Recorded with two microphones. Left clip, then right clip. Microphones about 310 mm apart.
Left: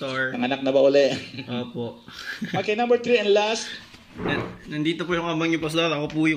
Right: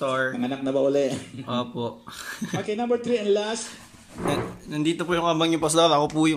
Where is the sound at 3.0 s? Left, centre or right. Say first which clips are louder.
Left 4 dB; left.